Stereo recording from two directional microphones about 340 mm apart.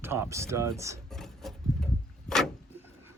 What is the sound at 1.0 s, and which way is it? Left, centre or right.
Filing, centre.